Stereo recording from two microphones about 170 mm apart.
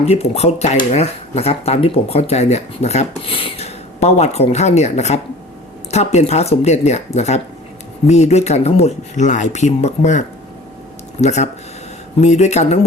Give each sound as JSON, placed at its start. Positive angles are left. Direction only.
{"t": 0.0, "sound": "speech", "side_deg": 40}